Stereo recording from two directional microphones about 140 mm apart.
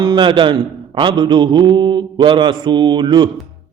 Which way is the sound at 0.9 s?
35° right (ahead or behind).